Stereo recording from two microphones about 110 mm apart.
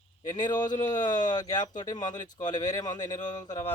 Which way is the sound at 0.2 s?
40° left (ahead or behind).